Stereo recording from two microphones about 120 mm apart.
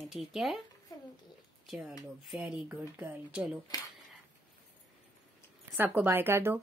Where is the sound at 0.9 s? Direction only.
30° left (ahead or behind).